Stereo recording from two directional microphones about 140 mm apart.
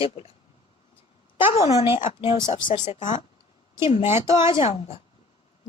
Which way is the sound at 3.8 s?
50° left (ahead or behind).